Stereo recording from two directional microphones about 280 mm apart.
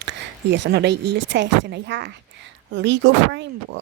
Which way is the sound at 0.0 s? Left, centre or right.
Right.